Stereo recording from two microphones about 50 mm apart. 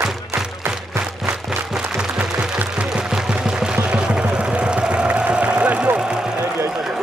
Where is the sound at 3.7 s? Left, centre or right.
Right.